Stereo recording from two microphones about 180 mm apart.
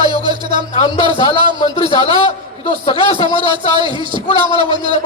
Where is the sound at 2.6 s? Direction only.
30° left (ahead or behind).